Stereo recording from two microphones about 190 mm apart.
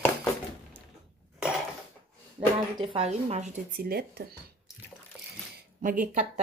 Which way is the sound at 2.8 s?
30° right (ahead or behind).